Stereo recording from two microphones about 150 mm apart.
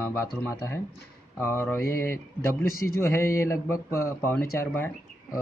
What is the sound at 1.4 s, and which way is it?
Mantra, 15° left (ahead or behind).